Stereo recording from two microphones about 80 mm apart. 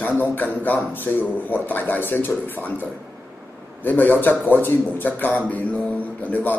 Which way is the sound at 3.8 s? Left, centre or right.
Left.